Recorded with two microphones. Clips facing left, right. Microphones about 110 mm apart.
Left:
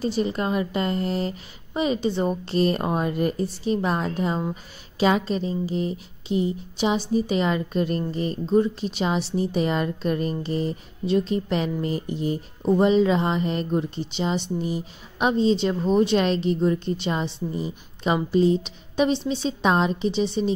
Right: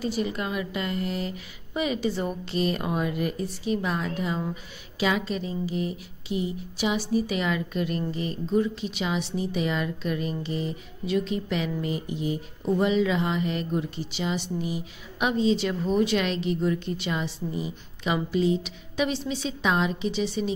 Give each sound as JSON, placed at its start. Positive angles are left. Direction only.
{"t": 0.0, "sound": "a woman's voice", "side_deg": 30}
{"t": 4.4, "sound": "speech", "side_deg": 20}
{"t": 5.0, "sound": "a woman's voice", "side_deg": 35}